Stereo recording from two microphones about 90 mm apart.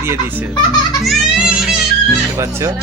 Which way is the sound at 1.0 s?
5° right (ahead or behind).